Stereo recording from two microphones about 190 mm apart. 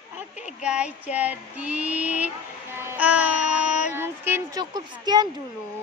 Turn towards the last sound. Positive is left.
turn(degrees=-20)  # may be behind; listen again after turning